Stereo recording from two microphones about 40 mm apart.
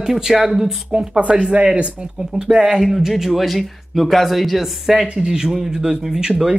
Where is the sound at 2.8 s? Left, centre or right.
Centre.